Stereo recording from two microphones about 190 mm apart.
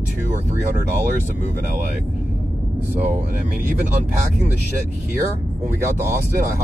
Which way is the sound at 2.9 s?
50° right (ahead or behind).